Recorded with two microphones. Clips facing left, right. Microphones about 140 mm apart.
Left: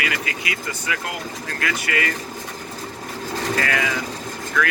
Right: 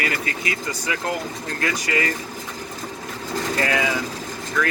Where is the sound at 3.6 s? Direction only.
20° right (ahead or behind).